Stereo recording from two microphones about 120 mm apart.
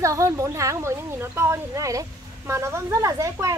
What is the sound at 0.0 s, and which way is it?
Speech, 25° right (ahead or behind).